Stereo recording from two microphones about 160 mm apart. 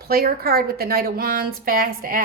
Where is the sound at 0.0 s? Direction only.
70° right (ahead or behind).